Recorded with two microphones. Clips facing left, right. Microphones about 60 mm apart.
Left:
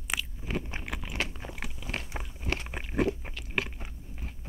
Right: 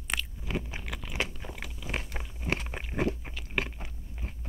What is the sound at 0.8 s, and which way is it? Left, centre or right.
Crunch, centre.